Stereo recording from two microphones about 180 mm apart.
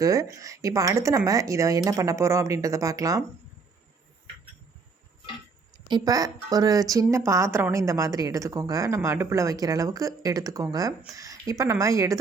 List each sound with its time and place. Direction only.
0.0 s speech: 20° right (ahead or behind)
5.7 s speech: 20° right (ahead or behind)